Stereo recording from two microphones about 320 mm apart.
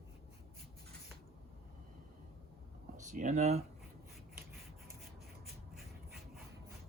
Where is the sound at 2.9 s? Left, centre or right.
Right.